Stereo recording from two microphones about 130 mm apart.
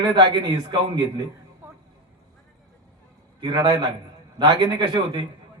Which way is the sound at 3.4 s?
35° right (ahead or behind).